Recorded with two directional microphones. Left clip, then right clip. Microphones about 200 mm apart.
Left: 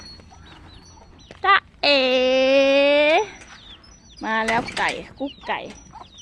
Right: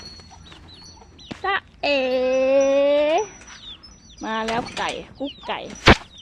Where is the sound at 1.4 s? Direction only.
10° left (ahead or behind).